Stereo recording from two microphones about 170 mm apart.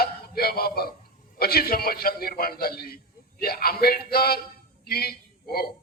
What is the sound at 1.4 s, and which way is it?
A man's voice, 65° left (ahead or behind).